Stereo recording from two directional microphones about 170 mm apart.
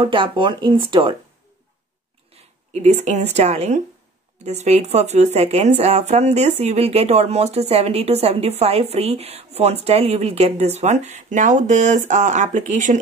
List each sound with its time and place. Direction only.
0.0 s speech: 30° right (ahead or behind)
2.3 s speech: 40° right (ahead or behind)